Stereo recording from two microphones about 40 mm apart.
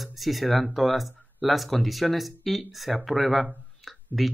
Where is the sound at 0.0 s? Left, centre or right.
Centre.